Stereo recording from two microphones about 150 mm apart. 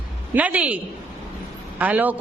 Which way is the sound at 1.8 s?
10° right (ahead or behind).